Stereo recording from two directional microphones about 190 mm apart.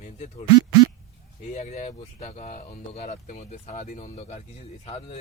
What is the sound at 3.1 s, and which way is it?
Speech, 35° left (ahead or behind).